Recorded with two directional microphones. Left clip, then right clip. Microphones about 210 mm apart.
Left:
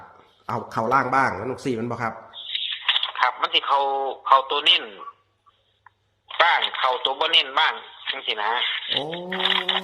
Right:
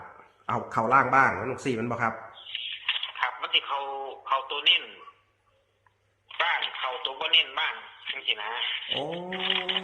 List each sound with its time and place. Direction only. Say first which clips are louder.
0.5 s speech: left 1 dB; 35° left (ahead or behind)
2.4 s a sound: left 9 dB; 55° left (ahead or behind)
6.2 s speech: left 8 dB; 50° left (ahead or behind)